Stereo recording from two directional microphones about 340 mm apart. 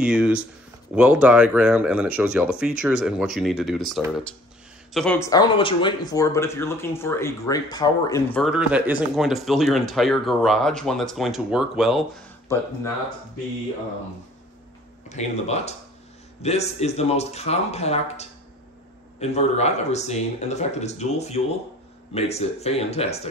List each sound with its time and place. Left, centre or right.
0.0 s speech: centre
15.0 s speech: centre